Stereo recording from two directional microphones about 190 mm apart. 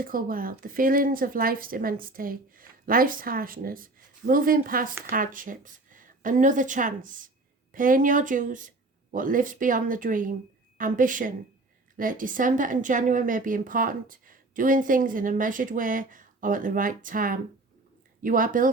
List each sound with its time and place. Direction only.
0.0 s a woman's voice: 50° right (ahead or behind)